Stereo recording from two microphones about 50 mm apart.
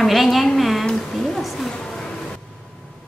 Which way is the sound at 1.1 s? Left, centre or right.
Centre.